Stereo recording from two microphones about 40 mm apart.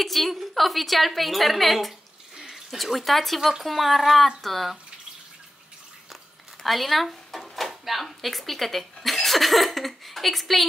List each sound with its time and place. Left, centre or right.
0.0 s a woman's voice: centre
2.3 s water: centre
2.8 s a woman's voice: centre
6.6 s speech: centre